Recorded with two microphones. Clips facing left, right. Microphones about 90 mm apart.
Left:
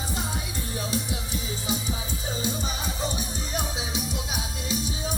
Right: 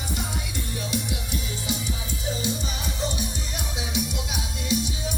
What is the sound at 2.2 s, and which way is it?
Music, 35° left (ahead or behind).